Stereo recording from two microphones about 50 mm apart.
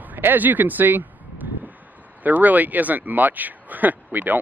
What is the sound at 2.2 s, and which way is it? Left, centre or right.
Speech, right.